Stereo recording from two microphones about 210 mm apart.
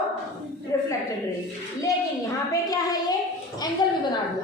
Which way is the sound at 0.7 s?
15° left (ahead or behind).